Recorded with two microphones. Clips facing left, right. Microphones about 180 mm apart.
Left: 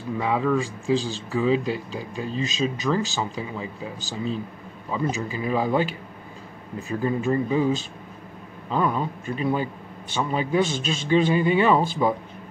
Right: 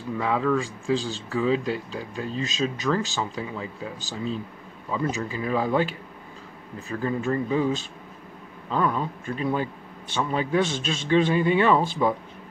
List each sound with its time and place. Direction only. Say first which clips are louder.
0.2 s speech: left 1 dB; 10° left (ahead or behind)
6.9 s speech: left 2 dB; 15° left (ahead or behind)